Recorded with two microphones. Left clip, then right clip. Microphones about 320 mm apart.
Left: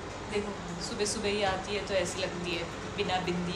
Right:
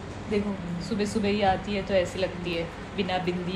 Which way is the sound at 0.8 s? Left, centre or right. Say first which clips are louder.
Right 4 dB; right.